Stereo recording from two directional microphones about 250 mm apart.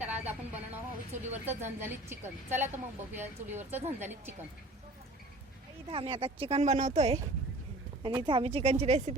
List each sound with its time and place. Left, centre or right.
0.0 s a woman's voice: centre
5.9 s speech: right